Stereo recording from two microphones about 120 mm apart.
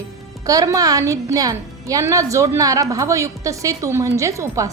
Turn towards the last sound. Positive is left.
turn(degrees=-25)  # may be behind; listen again after turning